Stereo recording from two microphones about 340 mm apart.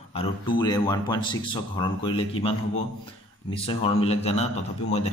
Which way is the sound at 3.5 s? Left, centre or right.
Centre.